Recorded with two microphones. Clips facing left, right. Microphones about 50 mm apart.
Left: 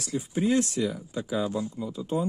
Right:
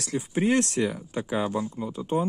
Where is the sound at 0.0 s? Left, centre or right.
Right.